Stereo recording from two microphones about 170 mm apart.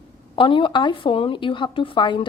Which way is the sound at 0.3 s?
30° left (ahead or behind).